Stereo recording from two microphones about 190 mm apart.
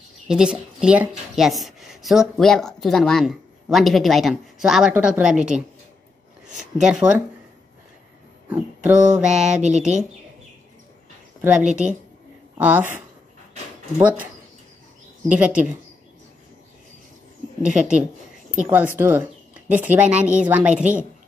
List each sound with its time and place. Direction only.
0.3 s a woman's voice: 5° right (ahead or behind)
6.6 s a woman's voice: 5° right (ahead or behind)
8.5 s a woman's voice: 10° right (ahead or behind)
9.6 s speech: 40° right (ahead or behind)
12.5 s speech: 5° right (ahead or behind)
15.3 s speech: 5° right (ahead or behind)
17.6 s speech: 5° right (ahead or behind)
18.9 s a sound: 10° right (ahead or behind)
19.9 s speech: 5° right (ahead or behind)